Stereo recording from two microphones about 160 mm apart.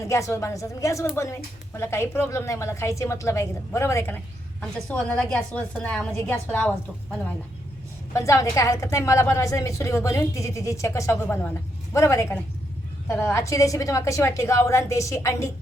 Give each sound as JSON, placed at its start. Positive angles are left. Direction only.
{"t": 0.0, "sound": "a woman's voice", "side_deg": 20}
{"t": 8.1, "sound": "a woman's voice", "side_deg": 20}